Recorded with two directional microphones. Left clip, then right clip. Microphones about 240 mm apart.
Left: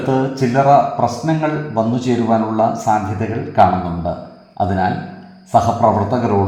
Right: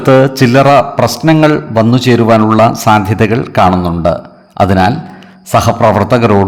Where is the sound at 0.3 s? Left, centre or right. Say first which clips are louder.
Right 6 dB; right.